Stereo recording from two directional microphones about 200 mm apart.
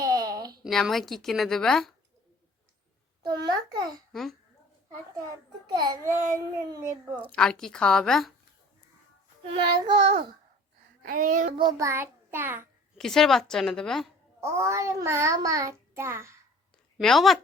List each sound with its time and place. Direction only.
0.0 s a sound: 20° right (ahead or behind)
0.6 s a woman's voice: centre (ahead or behind)
3.8 s child singing: 20° right (ahead or behind)
4.1 s a woman's voice: centre (ahead or behind)
5.6 s child singing: 20° right (ahead or behind)
7.2 s a woman's voice: 5° left (ahead or behind)
9.5 s child singing: 25° right (ahead or behind)
11.0 s speech: 45° right (ahead or behind)
11.5 s child singing: 20° right (ahead or behind)
13.0 s a woman's voice: centre (ahead or behind)
14.4 s child singing: 15° right (ahead or behind)
17.0 s a woman's voice: centre (ahead or behind)